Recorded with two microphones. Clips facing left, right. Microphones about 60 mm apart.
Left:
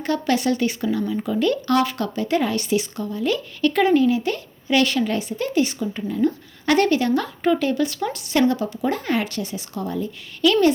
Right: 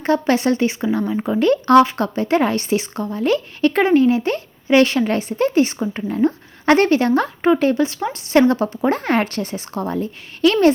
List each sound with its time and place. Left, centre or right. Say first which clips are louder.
0.0 s a woman's voice: right 4 dB; right
8.3 s a woman's voice: right 5 dB; right